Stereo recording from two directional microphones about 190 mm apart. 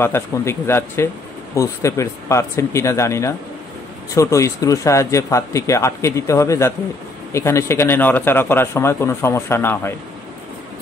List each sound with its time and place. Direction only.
0.0 s speech: 15° left (ahead or behind)